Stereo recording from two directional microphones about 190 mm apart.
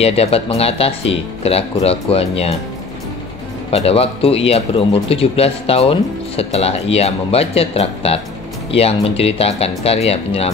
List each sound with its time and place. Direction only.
0.0 s speech: 30° left (ahead or behind)
3.7 s speech: 30° left (ahead or behind)